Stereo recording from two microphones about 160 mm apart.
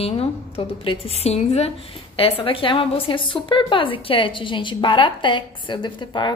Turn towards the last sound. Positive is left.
turn(degrees=30)  # may be behind; listen again after turning